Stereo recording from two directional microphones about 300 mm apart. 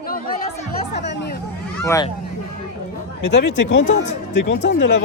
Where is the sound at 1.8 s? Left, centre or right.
Centre.